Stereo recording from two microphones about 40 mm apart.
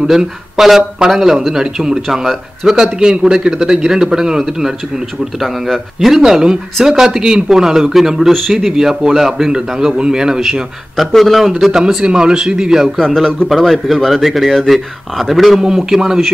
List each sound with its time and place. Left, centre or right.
0.0 s speech: centre
5.9 s speech: centre
11.1 s a man's voice: centre
11.4 s speech: centre
12.0 s speech: right
13.0 s a man's voice: centre
15.6 s speech: centre